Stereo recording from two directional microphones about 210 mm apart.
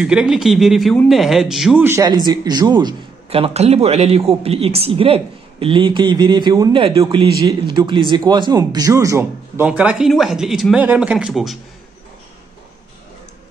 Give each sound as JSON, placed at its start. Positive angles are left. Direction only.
{"t": 0.0, "sound": "a man's voice", "side_deg": -5}
{"t": 1.9, "sound": "a man's voice", "side_deg": -15}